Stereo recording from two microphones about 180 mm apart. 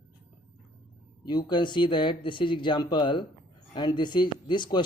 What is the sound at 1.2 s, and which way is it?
Speech, 25° left (ahead or behind).